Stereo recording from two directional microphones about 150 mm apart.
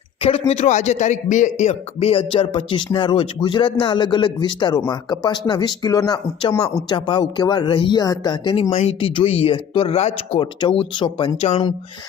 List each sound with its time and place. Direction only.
0.2 s speech: 40° left (ahead or behind)